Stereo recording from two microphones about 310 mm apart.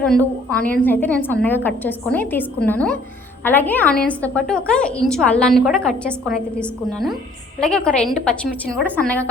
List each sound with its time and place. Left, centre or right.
0.0 s a woman's voice: centre